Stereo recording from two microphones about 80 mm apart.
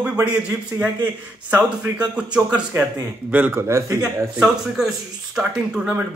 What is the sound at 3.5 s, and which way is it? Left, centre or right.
Speech, right.